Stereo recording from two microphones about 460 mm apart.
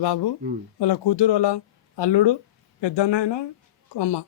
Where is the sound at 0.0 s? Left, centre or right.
Left.